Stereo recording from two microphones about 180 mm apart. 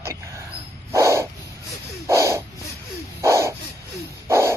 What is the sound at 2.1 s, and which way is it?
Snort, 15° right (ahead or behind).